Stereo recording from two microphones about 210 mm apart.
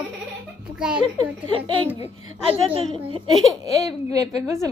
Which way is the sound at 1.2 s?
25° right (ahead or behind).